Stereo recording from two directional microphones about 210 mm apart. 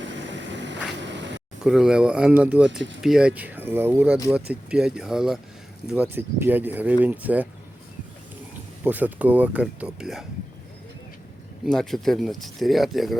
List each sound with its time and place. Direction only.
0.0 s vehicle: 60° right (ahead or behind)
1.6 s speech: 5° right (ahead or behind)
8.8 s speech: 10° right (ahead or behind)
11.6 s speech: centre (ahead or behind)